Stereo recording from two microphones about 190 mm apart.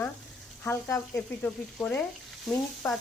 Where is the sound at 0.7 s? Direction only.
15° left (ahead or behind).